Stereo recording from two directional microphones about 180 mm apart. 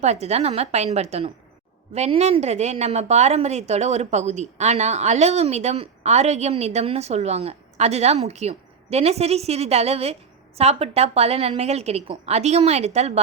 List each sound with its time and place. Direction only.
0.0 s a woman's voice: 35° right (ahead or behind)